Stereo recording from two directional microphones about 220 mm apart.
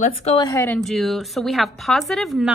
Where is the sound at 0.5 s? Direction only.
15° left (ahead or behind).